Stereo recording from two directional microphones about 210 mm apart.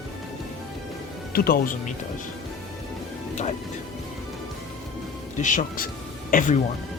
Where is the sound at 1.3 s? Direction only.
45° left (ahead or behind).